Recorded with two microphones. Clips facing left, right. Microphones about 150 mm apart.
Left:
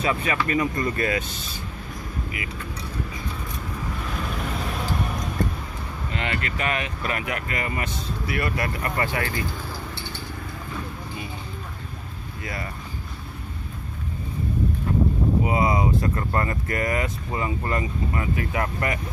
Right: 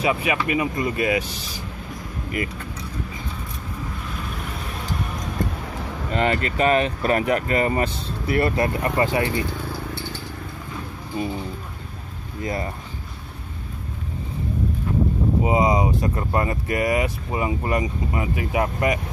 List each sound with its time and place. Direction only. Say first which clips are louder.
0.0 s speech: right 2 dB; 10° right (ahead or behind)
6.1 s speech: right 8 dB; 40° right (ahead or behind)
11.1 s speech: right 13 dB; 40° right (ahead or behind)
12.4 s speech: right 7 dB; 25° right (ahead or behind)
15.4 s speech: right 5 dB; 20° right (ahead or behind)